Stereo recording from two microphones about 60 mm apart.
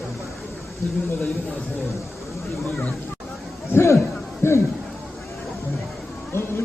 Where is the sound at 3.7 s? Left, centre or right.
Left.